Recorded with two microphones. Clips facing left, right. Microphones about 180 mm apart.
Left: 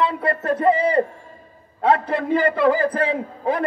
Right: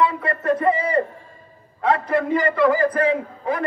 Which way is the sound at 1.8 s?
30° left (ahead or behind).